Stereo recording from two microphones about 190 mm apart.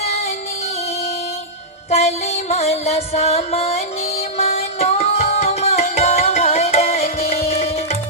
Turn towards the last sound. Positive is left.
turn(degrees=35)  # may be behind; listen again after turning